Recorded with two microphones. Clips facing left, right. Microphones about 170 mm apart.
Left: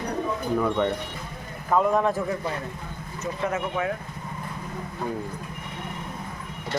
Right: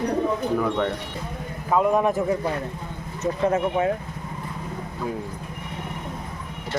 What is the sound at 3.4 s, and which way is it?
Speech, 30° right (ahead or behind).